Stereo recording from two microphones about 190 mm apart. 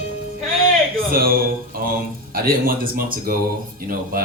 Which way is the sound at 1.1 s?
50° right (ahead or behind).